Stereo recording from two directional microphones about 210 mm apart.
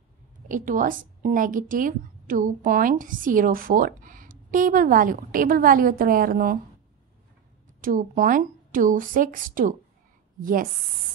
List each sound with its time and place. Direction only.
0.5 s a woman's voice: 40° right (ahead or behind)
7.8 s a woman's voice: 40° right (ahead or behind)